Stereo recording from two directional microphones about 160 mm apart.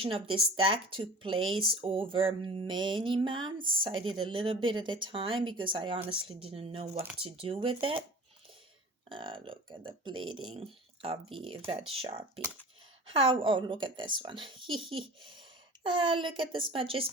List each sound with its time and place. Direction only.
0.0 s speech: 35° right (ahead or behind)
9.0 s speech: 30° right (ahead or behind)